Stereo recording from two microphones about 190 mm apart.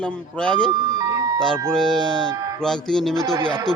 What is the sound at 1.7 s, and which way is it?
Speech, centre (ahead or behind).